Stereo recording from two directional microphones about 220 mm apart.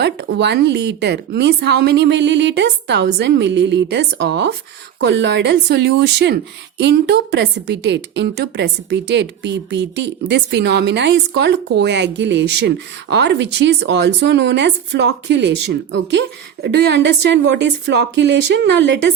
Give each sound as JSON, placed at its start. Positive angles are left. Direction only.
{"t": 0.0, "sound": "speech", "side_deg": -50}